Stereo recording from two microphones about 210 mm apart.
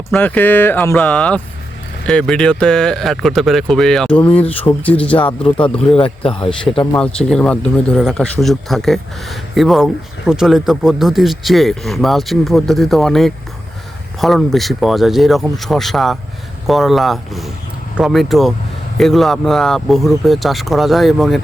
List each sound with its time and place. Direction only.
0.1 s speech: 10° left (ahead or behind)
5.1 s speech: 25° left (ahead or behind)
7.3 s speech: 5° left (ahead or behind)